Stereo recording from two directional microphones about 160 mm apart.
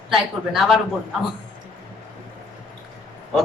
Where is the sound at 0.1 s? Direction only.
Centre (ahead or behind).